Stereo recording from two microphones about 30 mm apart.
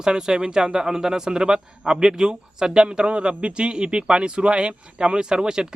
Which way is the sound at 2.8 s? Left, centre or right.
Right.